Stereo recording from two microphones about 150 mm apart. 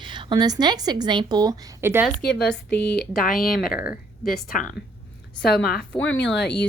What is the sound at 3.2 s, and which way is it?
Speech, 75° left (ahead or behind).